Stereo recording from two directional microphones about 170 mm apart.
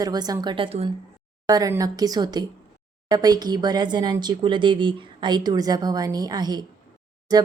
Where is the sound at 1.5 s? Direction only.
20° right (ahead or behind).